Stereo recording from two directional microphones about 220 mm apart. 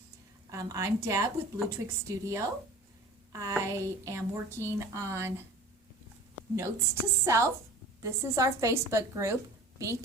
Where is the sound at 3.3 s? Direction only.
15° right (ahead or behind).